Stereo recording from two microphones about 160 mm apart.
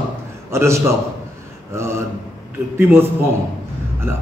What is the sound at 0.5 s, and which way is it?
A man's voice, 15° right (ahead or behind).